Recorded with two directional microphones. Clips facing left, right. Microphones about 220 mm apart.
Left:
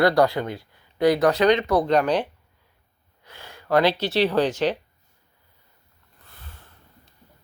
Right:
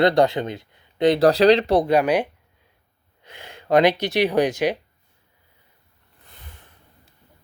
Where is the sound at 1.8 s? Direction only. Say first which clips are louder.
Right 2 dB; 10° right (ahead or behind).